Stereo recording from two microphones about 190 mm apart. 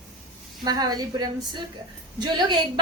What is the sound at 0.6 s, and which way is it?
A woman's voice, 20° right (ahead or behind).